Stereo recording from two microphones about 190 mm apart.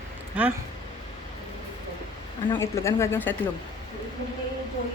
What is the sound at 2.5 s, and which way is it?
Speech, 15° left (ahead or behind).